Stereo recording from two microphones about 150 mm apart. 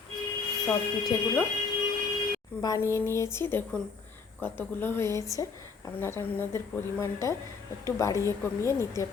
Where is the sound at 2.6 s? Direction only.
25° left (ahead or behind).